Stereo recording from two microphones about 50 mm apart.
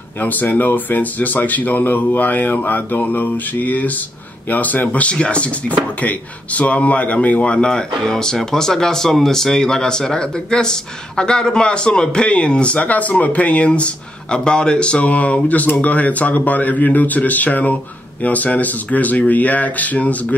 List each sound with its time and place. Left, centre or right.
0.2 s speech: left
5.1 s speech: left